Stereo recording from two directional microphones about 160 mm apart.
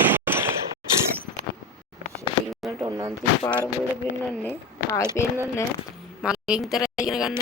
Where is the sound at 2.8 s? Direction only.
20° right (ahead or behind).